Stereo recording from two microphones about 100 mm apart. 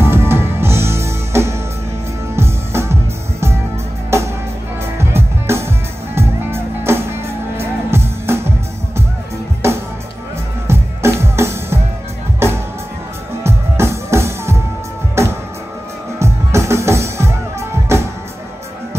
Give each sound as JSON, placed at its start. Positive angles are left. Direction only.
{"t": 0.0, "sound": "music", "side_deg": -25}